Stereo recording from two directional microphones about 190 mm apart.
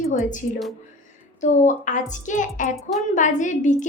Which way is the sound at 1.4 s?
40° left (ahead or behind).